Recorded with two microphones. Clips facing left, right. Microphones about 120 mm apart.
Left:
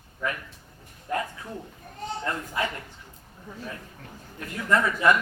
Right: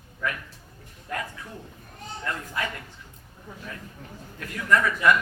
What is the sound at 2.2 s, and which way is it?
Speech, 25° left (ahead or behind).